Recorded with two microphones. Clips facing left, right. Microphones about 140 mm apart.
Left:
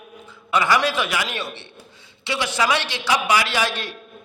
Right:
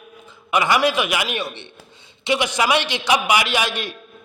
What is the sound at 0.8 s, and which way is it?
A man's voice, 15° right (ahead or behind).